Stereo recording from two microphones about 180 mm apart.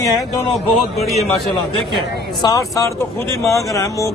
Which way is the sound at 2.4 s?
20° left (ahead or behind).